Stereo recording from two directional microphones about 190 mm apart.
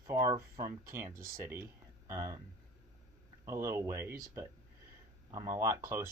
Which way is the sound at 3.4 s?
15° right (ahead or behind).